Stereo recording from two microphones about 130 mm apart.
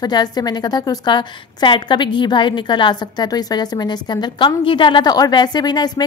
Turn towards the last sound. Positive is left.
turn(degrees=30)  # may be behind; listen again after turning